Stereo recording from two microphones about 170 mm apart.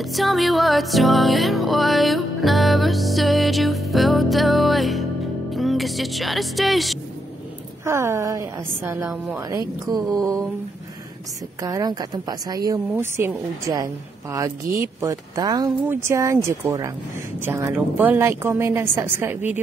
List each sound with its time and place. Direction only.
0.0 s music: centre (ahead or behind)
5.5 s speech: centre (ahead or behind)
7.8 s a woman's voice: 15° right (ahead or behind)
11.6 s speech: 20° right (ahead or behind)
14.3 s a woman's voice: 20° right (ahead or behind)